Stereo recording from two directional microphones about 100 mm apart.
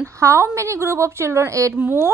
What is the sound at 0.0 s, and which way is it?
A woman's voice, 30° right (ahead or behind).